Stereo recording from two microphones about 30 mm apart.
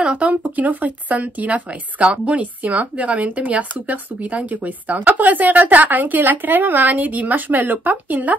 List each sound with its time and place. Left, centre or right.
0.2 s speech: right
2.0 s a woman's voice: right
2.3 s a woman's voice: right